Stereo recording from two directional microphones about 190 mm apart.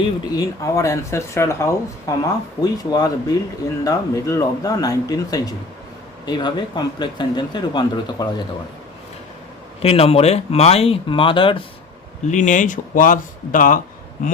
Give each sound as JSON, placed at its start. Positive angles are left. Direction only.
{"t": 0.3, "sound": "speech", "side_deg": 15}
{"t": 9.8, "sound": "speech", "side_deg": 30}
{"t": 12.3, "sound": "speech", "side_deg": 40}